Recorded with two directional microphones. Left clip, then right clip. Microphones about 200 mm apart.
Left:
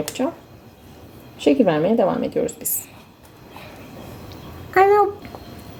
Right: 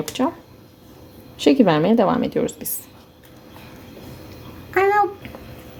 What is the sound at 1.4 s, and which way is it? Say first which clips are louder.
A woman's voice: right 1 dB; 30° right (ahead or behind).